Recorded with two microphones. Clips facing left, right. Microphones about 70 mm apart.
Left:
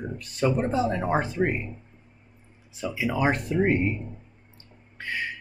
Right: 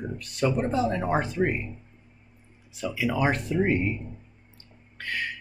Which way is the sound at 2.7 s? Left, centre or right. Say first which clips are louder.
Even; left.